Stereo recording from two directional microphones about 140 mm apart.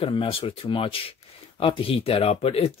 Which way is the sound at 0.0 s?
40° left (ahead or behind).